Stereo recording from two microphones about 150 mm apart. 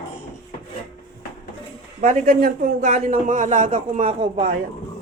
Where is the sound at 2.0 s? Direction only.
55° right (ahead or behind).